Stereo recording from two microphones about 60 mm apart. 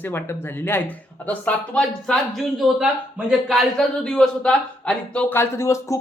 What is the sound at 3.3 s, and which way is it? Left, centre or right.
Speech, centre.